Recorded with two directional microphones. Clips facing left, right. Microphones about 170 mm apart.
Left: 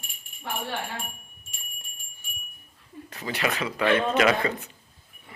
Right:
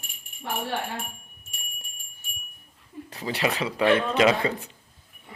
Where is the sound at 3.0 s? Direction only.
35° right (ahead or behind).